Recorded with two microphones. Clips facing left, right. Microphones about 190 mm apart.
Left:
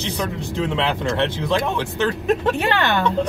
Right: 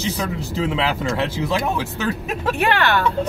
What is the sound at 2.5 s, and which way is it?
Speech, 15° left (ahead or behind).